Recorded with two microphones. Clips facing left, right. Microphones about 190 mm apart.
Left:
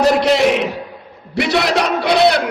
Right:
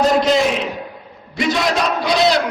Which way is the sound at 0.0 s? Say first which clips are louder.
Left 2 dB; 75° left (ahead or behind).